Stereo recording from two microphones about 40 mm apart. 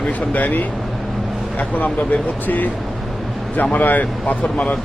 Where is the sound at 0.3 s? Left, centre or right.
Left.